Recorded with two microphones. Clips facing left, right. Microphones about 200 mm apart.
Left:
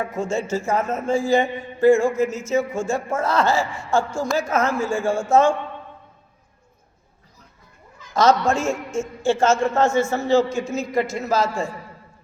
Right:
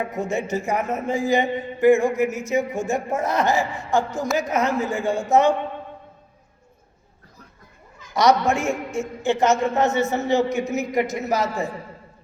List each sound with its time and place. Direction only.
0.0 s a man's voice: 20° right (ahead or behind)
8.1 s a man's voice: 15° right (ahead or behind)